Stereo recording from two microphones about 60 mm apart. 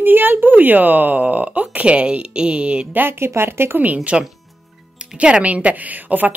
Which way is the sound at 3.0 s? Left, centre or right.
Right.